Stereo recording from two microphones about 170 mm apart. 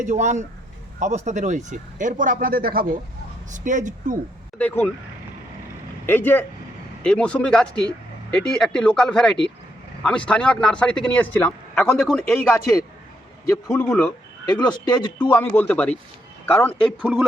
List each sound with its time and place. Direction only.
0.0 s speech: 45° right (ahead or behind)
3.5 s speech: 50° right (ahead or behind)
4.5 s speech: 10° left (ahead or behind)
6.1 s speech: 10° left (ahead or behind)
12.3 s speech: 15° left (ahead or behind)
13.7 s speech: 10° left (ahead or behind)
14.4 s speech: 25° left (ahead or behind)
15.2 s speech: 10° left (ahead or behind)